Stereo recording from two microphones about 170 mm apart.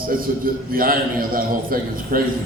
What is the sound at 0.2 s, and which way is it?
A man's voice, 55° right (ahead or behind).